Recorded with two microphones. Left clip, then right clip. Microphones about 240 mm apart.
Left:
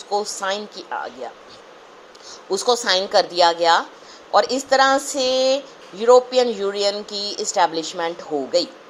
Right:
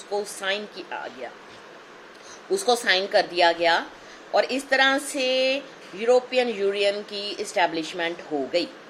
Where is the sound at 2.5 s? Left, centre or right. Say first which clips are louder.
Left 3 dB; centre.